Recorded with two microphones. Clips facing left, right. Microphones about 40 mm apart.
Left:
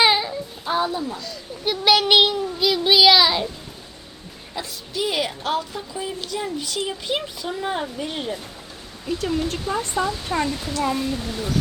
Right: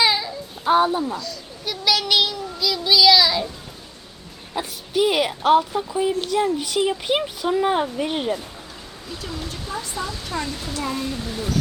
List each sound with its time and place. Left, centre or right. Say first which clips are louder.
0.0 s child singing: left 2 dB; left
0.6 s speech: right 6 dB; right
1.2 s a child's voice: left 3 dB; left
4.5 s a woman's voice: right 6 dB; right
5.3 s speech: right 8 dB; centre
9.2 s a child's voice: left 8 dB; centre
10.7 s speech: left 3 dB; centre